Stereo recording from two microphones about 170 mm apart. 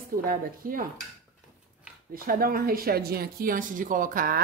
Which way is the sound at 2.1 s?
55° right (ahead or behind).